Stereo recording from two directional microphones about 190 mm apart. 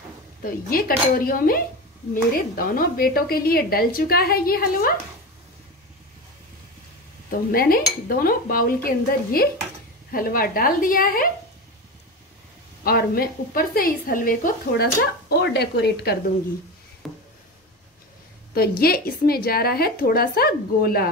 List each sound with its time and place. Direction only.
0.4 s a woman's voice: 50° left (ahead or behind)
7.2 s a woman's voice: 50° left (ahead or behind)
12.8 s a woman's voice: 50° left (ahead or behind)
17.0 s a sound: centre (ahead or behind)
18.5 s a woman's voice: 55° left (ahead or behind)